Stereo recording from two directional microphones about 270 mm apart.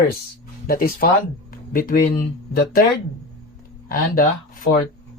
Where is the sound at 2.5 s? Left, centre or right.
Left.